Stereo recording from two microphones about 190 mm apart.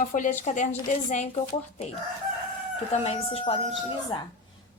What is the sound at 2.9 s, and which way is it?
A woman's voice, 35° left (ahead or behind).